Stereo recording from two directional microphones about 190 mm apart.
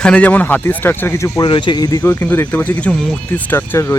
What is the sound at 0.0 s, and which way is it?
Speech, 5° left (ahead or behind).